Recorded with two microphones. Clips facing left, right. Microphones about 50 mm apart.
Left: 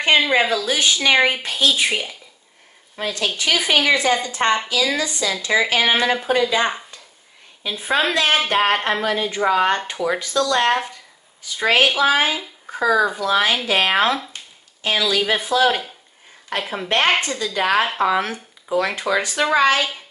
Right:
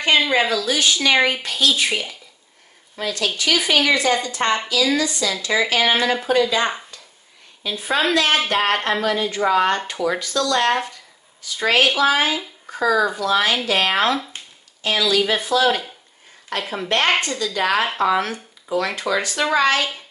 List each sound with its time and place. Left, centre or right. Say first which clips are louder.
0.3 s speech: left 1 dB; centre
16.6 s speech: left 1 dB; centre